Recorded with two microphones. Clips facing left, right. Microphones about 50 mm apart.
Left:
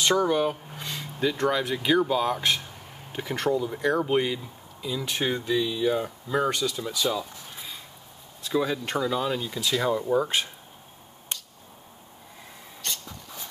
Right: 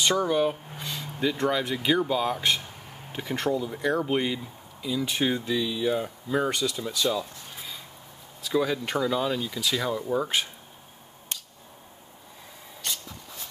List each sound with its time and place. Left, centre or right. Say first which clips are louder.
0.2 s speech: left 1 dB; centre
10.1 s speech: left 2 dB; centre
12.8 s a sound: even; centre